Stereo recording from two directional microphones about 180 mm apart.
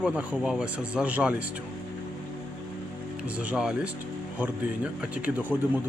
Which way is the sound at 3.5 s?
5° right (ahead or behind).